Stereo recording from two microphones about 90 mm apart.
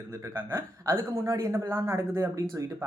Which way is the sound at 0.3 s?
25° right (ahead or behind).